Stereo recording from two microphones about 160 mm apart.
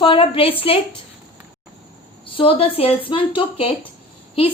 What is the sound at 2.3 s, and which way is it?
Speech, 35° left (ahead or behind).